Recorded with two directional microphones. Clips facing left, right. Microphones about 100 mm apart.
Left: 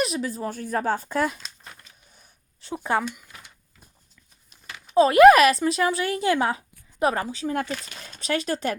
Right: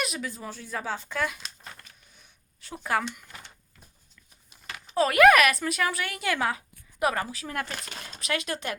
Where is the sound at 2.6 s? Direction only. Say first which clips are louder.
Left 8 dB; 30° left (ahead or behind).